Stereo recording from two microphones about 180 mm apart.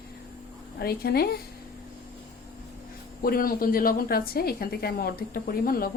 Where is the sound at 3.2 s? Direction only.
55° left (ahead or behind).